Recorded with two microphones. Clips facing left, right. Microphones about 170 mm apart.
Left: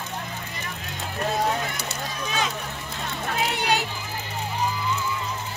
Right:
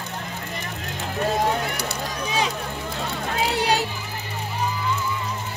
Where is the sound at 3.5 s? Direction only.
35° right (ahead or behind).